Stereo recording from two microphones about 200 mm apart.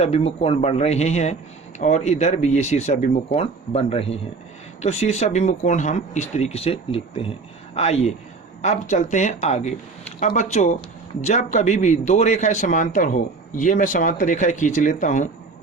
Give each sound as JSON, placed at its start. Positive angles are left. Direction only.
{"t": 0.0, "sound": "a man's voice", "side_deg": 30}